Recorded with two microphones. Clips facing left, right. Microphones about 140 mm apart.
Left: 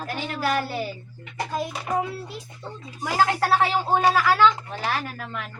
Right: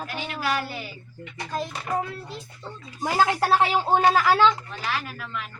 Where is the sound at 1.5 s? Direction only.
10° left (ahead or behind).